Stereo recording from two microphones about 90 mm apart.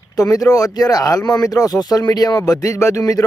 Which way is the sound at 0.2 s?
40° left (ahead or behind).